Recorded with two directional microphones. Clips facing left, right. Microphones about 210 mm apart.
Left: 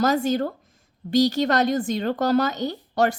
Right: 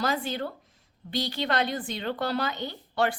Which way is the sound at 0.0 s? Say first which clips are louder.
Left 8 dB; 45° left (ahead or behind).